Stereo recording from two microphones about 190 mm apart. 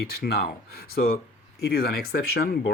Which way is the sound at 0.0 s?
50° left (ahead or behind).